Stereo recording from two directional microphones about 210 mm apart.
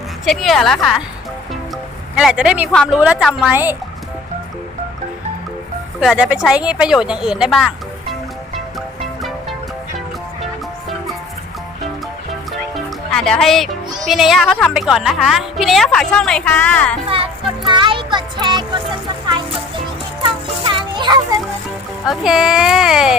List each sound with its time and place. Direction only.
0.3 s speech: centre (ahead or behind)
2.1 s speech: 5° right (ahead or behind)
6.0 s speech: 5° right (ahead or behind)
10.4 s music: centre (ahead or behind)
12.7 s speech: 5° left (ahead or behind)
17.7 s speech: 25° right (ahead or behind)
20.7 s music: 20° right (ahead or behind)
22.0 s speech: centre (ahead or behind)